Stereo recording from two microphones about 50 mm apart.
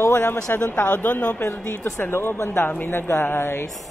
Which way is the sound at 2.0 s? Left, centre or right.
Left.